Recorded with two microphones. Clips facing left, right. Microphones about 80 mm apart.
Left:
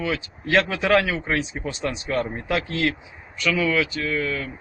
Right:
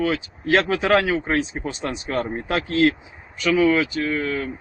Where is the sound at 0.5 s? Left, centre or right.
Right.